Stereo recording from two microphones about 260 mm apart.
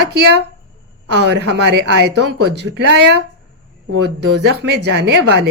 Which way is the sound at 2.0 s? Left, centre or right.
Right.